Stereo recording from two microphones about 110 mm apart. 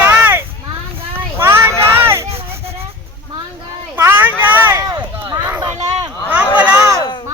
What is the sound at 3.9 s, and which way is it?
Vehicle, 20° right (ahead or behind).